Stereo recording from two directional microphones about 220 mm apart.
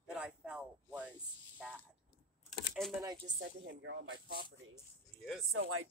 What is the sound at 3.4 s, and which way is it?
Speech, 50° right (ahead or behind).